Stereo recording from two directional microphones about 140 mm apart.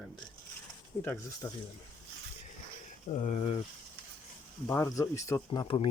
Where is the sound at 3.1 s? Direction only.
60° left (ahead or behind).